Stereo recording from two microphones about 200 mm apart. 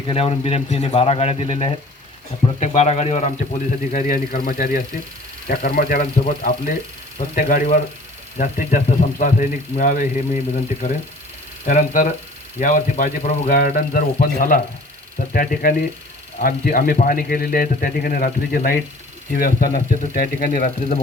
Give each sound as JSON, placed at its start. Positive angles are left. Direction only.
{"t": 0.1, "sound": "speech", "side_deg": 30}